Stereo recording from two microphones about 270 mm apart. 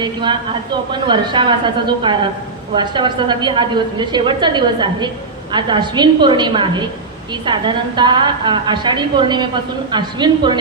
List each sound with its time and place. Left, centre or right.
0.0 s a woman's voice: centre